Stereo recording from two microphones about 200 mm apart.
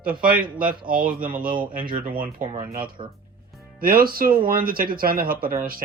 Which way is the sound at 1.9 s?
45° right (ahead or behind).